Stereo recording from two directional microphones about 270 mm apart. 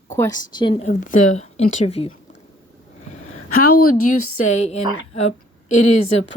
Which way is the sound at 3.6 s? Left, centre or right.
Left.